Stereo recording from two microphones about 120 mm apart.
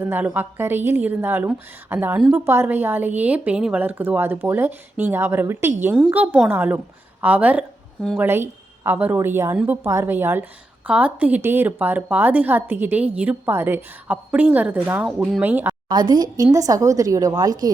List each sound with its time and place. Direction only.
0.0 s a woman's voice: 15° right (ahead or behind)
15.0 s speech: centre (ahead or behind)
15.4 s a woman's voice: 15° right (ahead or behind)
15.9 s a woman's voice: 35° right (ahead or behind)